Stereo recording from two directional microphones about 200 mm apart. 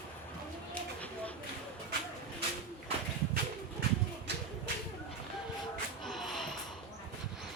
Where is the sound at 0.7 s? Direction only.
5° left (ahead or behind).